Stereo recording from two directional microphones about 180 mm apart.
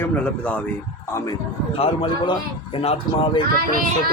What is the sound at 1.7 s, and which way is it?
Speech, 30° left (ahead or behind).